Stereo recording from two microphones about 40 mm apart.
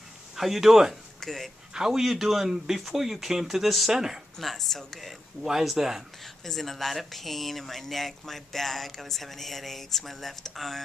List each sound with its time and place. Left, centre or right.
0.4 s speech: centre
1.2 s speech: centre
1.7 s speech: centre
4.4 s speech: centre
5.4 s speech: centre
6.2 s speech: centre